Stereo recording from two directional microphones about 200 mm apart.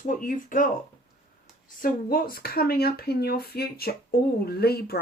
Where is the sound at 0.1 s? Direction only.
40° left (ahead or behind).